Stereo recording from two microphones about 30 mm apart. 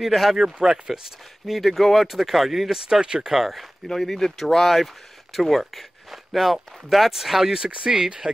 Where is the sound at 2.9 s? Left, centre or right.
Right.